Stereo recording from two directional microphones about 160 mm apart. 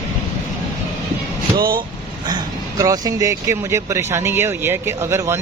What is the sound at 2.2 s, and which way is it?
Speech, 25° right (ahead or behind).